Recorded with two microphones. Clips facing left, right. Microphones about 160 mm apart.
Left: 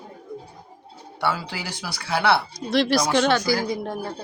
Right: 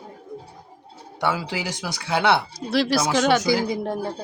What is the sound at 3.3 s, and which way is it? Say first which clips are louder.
Speech: right 2 dB; 20° right (ahead or behind).